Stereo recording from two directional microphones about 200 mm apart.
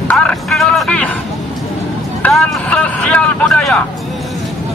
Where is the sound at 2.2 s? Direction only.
5° left (ahead or behind).